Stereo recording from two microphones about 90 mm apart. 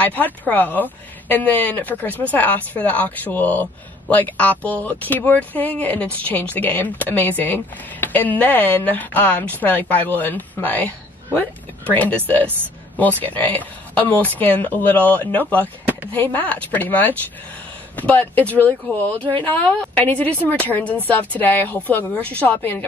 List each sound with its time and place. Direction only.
0.0 s speech: 20° left (ahead or behind)
11.9 s a woman's voice: 20° left (ahead or behind)